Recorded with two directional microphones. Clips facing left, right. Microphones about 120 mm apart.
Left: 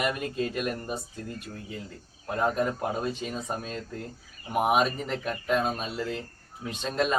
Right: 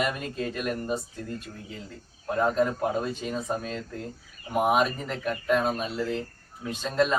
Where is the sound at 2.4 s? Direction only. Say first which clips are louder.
Right 2 dB; 20° left (ahead or behind).